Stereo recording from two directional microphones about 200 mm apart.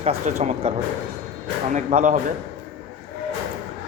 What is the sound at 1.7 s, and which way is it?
Speech, 35° right (ahead or behind).